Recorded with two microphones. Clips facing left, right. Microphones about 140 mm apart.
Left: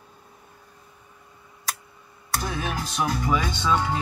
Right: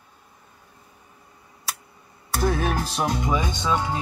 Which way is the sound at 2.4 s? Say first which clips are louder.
Right 8 dB; 45° right (ahead or behind).